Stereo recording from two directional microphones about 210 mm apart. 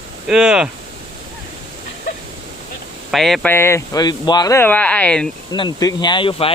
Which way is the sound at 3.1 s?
Centre (ahead or behind).